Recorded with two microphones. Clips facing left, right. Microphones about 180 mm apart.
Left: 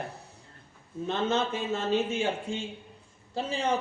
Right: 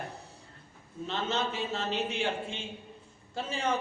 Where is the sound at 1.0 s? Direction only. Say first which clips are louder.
Left 4 dB; 50° left (ahead or behind).